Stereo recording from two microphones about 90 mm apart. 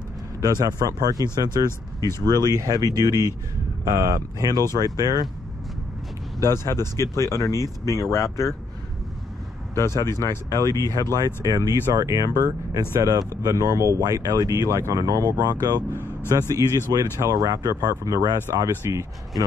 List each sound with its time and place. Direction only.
0.4 s speech: 50° right (ahead or behind)
2.0 s speech: 30° left (ahead or behind)
2.2 s speech: 45° right (ahead or behind)
6.4 s speech: 30° left (ahead or behind)
9.8 s speech: 30° left (ahead or behind)
10.7 s speech: 40° right (ahead or behind)
15.9 s vehicle: 25° left (ahead or behind)
16.3 s speech: 40° right (ahead or behind)